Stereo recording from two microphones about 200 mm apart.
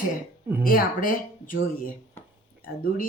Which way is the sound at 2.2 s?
10° left (ahead or behind).